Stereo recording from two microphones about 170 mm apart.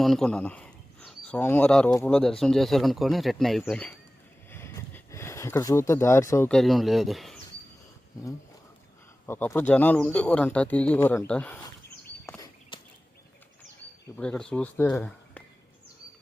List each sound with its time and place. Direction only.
0.0 s speech: centre (ahead or behind)
4.5 s a sound: 15° left (ahead or behind)
6.5 s speech: centre (ahead or behind)
9.2 s speech: 15° left (ahead or behind)
12.2 s walk: 15° left (ahead or behind)
12.7 s a sound: 25° left (ahead or behind)
14.2 s speech: 5° left (ahead or behind)